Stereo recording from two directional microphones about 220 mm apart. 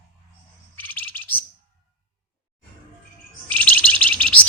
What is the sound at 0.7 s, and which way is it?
Bird, 10° left (ahead or behind).